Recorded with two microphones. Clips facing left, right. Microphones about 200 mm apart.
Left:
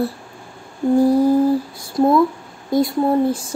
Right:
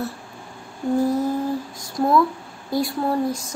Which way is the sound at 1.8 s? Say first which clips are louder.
Left 3 dB; 25° left (ahead or behind).